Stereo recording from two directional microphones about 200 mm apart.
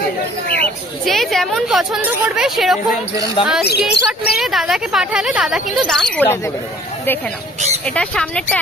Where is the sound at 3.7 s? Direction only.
55° left (ahead or behind).